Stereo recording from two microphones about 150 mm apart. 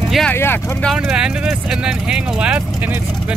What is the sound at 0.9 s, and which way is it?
Speech, 5° right (ahead or behind).